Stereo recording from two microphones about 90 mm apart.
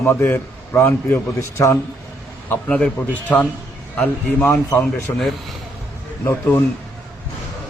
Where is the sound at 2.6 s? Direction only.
10° left (ahead or behind).